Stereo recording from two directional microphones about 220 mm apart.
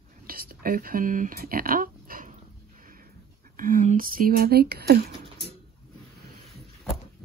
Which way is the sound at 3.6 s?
35° right (ahead or behind).